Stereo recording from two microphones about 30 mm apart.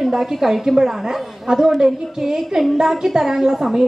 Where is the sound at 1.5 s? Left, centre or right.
Right.